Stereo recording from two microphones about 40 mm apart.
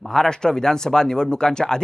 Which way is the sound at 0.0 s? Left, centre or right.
Centre.